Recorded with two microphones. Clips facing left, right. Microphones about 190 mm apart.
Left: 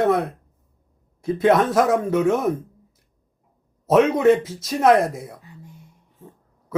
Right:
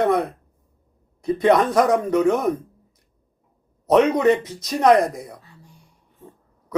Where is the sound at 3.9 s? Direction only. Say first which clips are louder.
Left 1 dB; 5° left (ahead or behind).